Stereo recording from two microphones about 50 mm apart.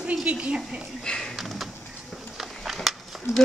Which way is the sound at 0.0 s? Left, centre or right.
Right.